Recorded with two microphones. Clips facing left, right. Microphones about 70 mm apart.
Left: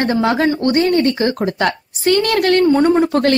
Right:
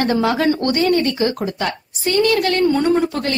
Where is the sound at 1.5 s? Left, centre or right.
Left.